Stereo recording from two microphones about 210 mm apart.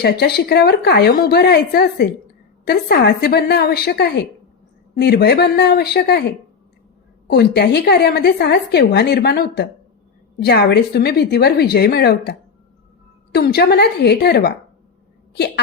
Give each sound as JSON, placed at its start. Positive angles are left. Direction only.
{"t": 0.0, "sound": "a woman's voice", "side_deg": 50}
{"t": 7.3, "sound": "a woman's voice", "side_deg": 50}